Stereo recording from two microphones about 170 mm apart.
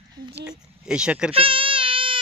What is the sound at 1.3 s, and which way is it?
Baby cry, 30° right (ahead or behind).